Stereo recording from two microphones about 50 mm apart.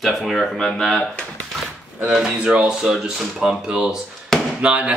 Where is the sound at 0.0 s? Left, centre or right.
Centre.